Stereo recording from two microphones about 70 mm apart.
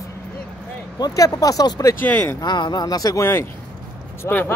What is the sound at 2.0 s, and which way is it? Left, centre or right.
Speech, left.